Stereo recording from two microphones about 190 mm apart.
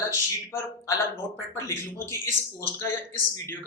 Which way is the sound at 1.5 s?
15° left (ahead or behind).